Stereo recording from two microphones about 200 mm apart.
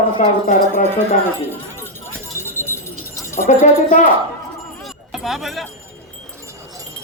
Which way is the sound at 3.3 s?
40° left (ahead or behind).